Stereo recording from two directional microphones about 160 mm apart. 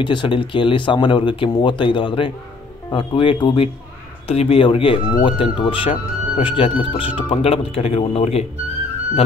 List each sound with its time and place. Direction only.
0.0 s speech: 30° left (ahead or behind)